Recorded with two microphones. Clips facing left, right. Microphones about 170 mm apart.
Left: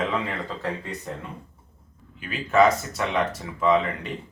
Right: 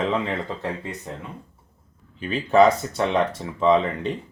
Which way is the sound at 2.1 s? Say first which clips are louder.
Right 3 dB; 30° right (ahead or behind).